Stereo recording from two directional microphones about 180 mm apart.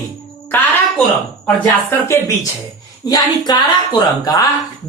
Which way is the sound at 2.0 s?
20° left (ahead or behind).